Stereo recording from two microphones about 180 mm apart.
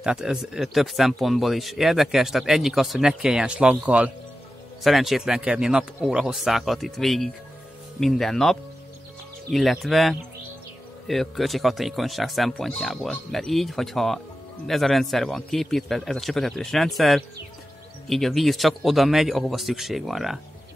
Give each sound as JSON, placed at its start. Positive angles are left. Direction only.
{"t": 0.0, "sound": "speech", "side_deg": -5}